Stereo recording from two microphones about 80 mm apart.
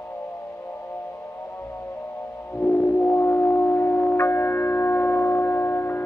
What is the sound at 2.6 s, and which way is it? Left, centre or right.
Music, left.